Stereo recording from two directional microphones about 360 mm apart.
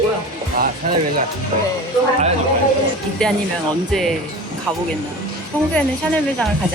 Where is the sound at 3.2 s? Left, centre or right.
Centre.